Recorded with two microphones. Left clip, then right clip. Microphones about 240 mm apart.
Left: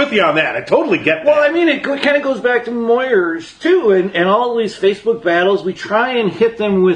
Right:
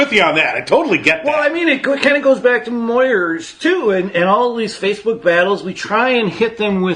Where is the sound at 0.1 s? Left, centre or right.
Right.